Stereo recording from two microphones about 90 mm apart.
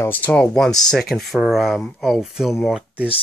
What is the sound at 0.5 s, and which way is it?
Speech, 5° left (ahead or behind).